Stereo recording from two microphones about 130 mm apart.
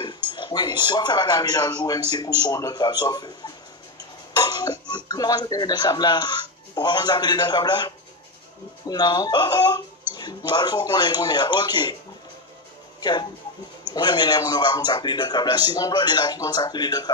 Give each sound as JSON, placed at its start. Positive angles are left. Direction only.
{"t": 0.0, "sound": "speech", "side_deg": 35}
{"t": 13.9, "sound": "speech", "side_deg": 35}